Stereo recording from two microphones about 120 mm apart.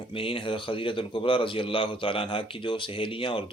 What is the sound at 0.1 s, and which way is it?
A man's voice, 50° left (ahead or behind).